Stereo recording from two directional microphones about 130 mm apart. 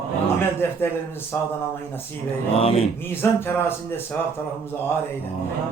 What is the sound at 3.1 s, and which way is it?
Speech, 15° left (ahead or behind).